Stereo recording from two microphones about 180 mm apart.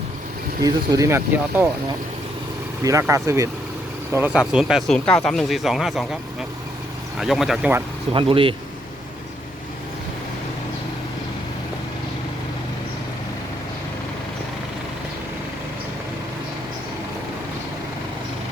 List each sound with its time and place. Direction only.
0.6 s speech: 20° right (ahead or behind)
2.8 s speech: 15° right (ahead or behind)
7.2 s speech: centre (ahead or behind)
8.1 s speech: 30° right (ahead or behind)